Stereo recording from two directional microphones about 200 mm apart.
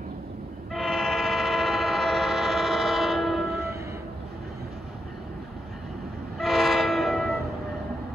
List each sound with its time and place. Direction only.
0.7 s train: centre (ahead or behind)
6.3 s train: centre (ahead or behind)